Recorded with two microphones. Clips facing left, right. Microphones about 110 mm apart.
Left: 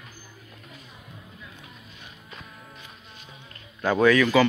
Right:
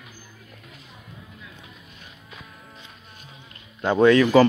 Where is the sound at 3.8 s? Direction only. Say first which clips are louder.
Right 3 dB; 25° right (ahead or behind).